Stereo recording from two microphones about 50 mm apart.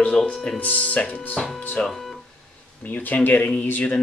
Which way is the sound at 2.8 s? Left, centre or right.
Left.